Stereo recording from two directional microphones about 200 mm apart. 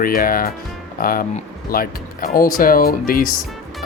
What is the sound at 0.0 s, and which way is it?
Speech, 45° left (ahead or behind).